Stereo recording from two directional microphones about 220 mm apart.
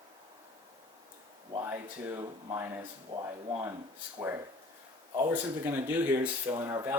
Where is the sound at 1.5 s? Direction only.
10° right (ahead or behind).